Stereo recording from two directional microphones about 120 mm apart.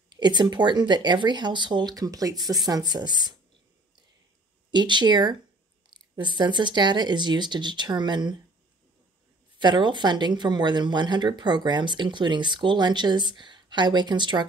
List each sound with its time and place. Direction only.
0.1 s speech: 35° right (ahead or behind)
4.6 s speech: 40° right (ahead or behind)
9.6 s speech: 40° right (ahead or behind)